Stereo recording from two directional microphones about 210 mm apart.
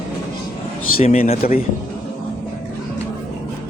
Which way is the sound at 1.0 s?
30° left (ahead or behind).